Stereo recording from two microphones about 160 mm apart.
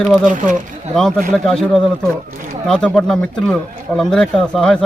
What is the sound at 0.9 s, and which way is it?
A man's voice, centre (ahead or behind).